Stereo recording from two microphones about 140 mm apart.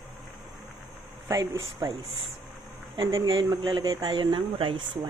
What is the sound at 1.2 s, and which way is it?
Speech, 20° right (ahead or behind).